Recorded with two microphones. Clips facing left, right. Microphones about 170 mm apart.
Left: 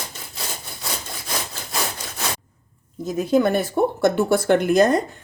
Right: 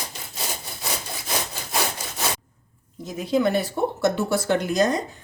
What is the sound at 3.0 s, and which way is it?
Speech, 50° left (ahead or behind).